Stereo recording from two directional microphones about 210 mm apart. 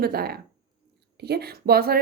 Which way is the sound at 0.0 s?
45° right (ahead or behind).